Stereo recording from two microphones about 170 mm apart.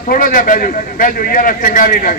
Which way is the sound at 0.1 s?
55° left (ahead or behind).